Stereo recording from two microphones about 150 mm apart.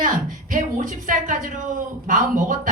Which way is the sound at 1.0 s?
60° right (ahead or behind).